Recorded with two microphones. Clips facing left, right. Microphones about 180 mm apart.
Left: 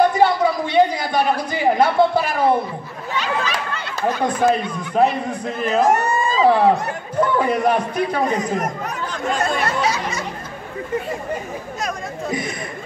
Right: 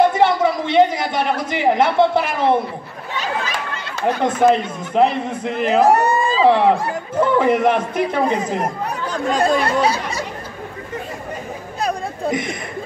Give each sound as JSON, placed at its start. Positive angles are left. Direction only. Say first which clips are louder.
{"t": 0.0, "sound": "a sound", "louder": "right 1 dB", "side_deg": -25}
{"t": 4.2, "sound": "a man's voice", "louder": "right 3 dB", "side_deg": -25}
{"t": 5.9, "sound": "speech", "louder": "right 3 dB", "side_deg": -35}
{"t": 11.8, "sound": "chatter", "louder": "right 6 dB", "side_deg": -20}